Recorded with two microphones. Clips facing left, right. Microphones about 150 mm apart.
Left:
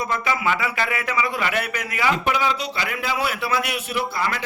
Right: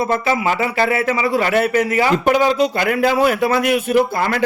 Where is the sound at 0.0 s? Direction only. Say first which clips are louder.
Right 6 dB; 35° right (ahead or behind).